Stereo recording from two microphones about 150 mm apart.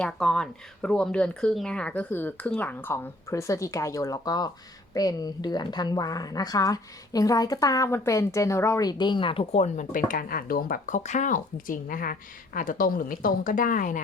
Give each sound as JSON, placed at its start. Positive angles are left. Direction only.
{"t": 0.0, "sound": "a woman's voice", "side_deg": 5}
{"t": 10.1, "sound": "a woman's voice", "side_deg": 75}